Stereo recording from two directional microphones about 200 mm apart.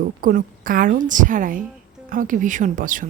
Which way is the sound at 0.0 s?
45° right (ahead or behind).